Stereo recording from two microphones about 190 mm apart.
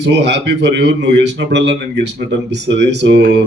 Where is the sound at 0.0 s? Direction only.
65° right (ahead or behind).